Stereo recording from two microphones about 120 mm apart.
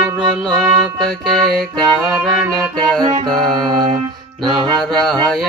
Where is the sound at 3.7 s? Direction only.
40° right (ahead or behind).